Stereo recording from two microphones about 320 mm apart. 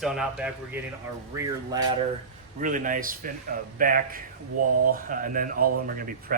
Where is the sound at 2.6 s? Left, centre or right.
Right.